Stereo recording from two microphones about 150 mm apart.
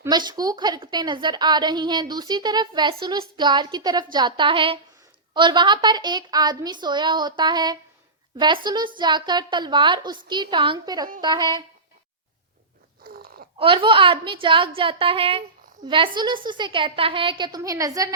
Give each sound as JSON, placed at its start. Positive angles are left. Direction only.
{"t": 0.1, "sound": "a woman's voice", "side_deg": -30}
{"t": 13.1, "sound": "a sound", "side_deg": -85}
{"t": 13.6, "sound": "a woman's voice", "side_deg": -35}